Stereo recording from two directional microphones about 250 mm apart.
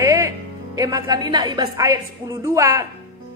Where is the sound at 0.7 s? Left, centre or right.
Centre.